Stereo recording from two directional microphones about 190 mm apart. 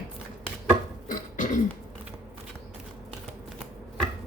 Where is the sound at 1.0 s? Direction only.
45° left (ahead or behind).